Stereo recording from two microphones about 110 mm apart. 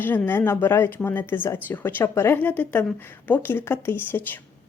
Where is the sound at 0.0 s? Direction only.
15° left (ahead or behind).